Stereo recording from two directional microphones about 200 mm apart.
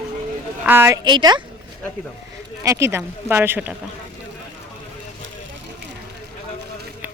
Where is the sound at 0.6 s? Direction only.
10° right (ahead or behind).